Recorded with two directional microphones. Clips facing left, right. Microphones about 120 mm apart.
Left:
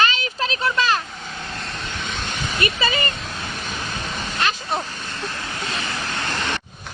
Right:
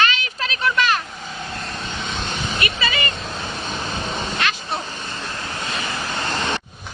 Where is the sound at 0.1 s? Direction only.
35° left (ahead or behind).